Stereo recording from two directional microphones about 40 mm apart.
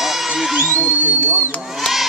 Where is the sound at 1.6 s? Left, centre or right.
Centre.